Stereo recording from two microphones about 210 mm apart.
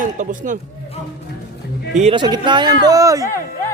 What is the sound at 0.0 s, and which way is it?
Speech, 40° right (ahead or behind).